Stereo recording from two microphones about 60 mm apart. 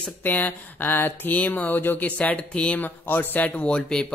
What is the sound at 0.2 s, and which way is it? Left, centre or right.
Speech, left.